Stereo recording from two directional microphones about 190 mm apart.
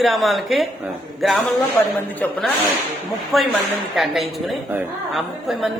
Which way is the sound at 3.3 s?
Centre (ahead or behind).